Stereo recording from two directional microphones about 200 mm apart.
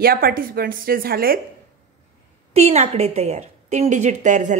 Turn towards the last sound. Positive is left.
turn(degrees=-35)  # may be behind; listen again after turning